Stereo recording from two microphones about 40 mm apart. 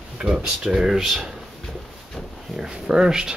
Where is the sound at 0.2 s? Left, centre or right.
Right.